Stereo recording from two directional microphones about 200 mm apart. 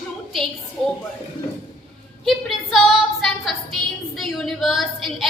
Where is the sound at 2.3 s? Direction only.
Centre (ahead or behind).